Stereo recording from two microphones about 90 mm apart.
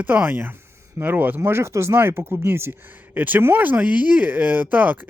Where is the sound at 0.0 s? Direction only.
20° right (ahead or behind).